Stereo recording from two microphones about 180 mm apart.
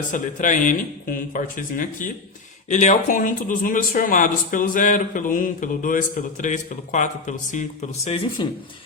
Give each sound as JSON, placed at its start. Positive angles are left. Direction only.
{"t": 0.1, "sound": "speech", "side_deg": 45}